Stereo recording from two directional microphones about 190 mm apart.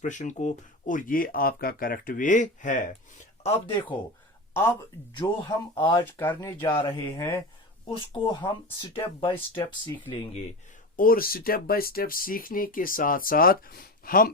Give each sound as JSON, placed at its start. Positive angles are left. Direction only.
{"t": 0.0, "sound": "speech", "side_deg": 40}
{"t": 3.4, "sound": "speech", "side_deg": 30}
{"t": 5.1, "sound": "speech", "side_deg": 25}
{"t": 6.1, "sound": "speech", "side_deg": 10}
{"t": 7.9, "sound": "speech", "side_deg": 25}
{"t": 10.9, "sound": "speech", "side_deg": 50}